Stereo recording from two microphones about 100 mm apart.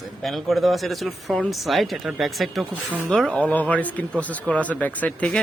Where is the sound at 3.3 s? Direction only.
15° left (ahead or behind).